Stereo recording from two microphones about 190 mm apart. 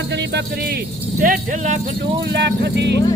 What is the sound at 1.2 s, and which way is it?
Speech, 45° right (ahead or behind).